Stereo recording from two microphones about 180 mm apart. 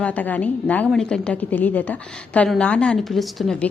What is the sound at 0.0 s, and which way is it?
A woman's voice, 10° left (ahead or behind).